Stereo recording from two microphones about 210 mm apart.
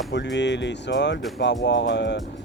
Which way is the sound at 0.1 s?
55° left (ahead or behind).